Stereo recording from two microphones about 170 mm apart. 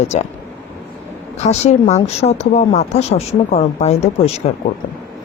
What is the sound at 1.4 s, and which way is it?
Speech, 40° left (ahead or behind).